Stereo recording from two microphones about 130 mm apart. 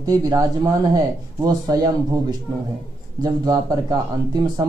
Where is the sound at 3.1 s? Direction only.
30° right (ahead or behind).